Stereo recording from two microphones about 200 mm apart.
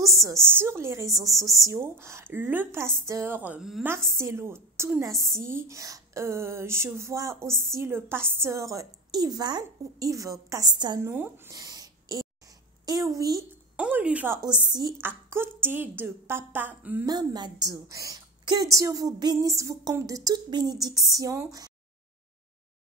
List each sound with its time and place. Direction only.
0.0 s speech: 15° right (ahead or behind)
13.7 s speech: 5° right (ahead or behind)
17.1 s speech: 20° right (ahead or behind)